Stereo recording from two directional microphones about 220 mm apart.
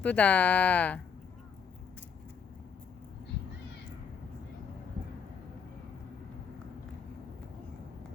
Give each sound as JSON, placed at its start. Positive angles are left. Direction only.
{"t": 0.0, "sound": "speech", "side_deg": 5}